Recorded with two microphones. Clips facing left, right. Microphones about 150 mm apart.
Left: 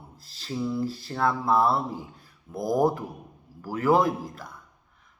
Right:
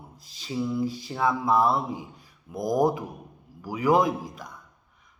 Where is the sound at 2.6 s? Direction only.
15° right (ahead or behind).